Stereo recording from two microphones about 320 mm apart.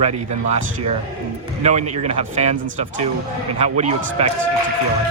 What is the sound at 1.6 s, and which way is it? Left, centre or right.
Speech, right.